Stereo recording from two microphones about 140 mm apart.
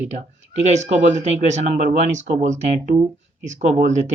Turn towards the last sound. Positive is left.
turn(degrees=-60)  # may be behind; listen again after turning